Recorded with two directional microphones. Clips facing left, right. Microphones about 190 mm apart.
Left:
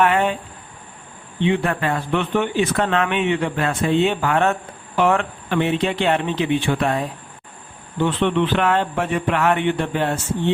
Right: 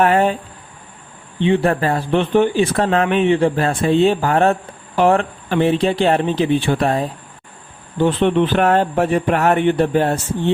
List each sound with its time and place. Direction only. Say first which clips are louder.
0.0 s speech: right 3 dB; 40° right (ahead or behind)
1.4 s speech: right 4 dB; 35° right (ahead or behind)